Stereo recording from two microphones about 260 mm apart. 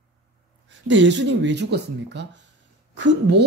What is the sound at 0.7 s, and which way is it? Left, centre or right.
Speech, right.